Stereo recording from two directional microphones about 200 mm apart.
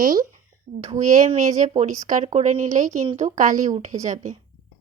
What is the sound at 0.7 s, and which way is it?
Speech, 55° right (ahead or behind).